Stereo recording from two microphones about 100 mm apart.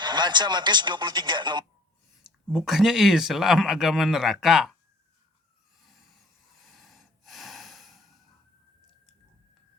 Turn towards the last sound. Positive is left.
turn(degrees=0)  # may be behind; listen again after turning